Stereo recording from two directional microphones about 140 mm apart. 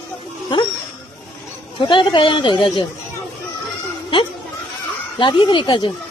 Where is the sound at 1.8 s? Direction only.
35° left (ahead or behind).